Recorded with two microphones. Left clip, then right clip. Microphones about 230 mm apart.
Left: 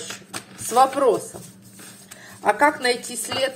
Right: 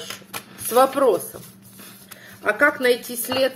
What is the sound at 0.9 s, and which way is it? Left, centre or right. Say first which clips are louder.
Speech: right 1 dB; centre.